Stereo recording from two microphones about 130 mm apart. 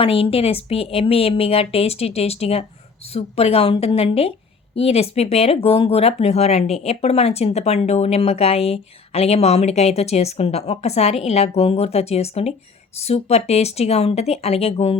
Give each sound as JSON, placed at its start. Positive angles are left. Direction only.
{"t": 0.0, "sound": "speech", "side_deg": 45}